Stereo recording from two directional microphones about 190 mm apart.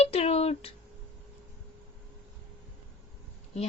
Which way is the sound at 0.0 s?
35° left (ahead or behind).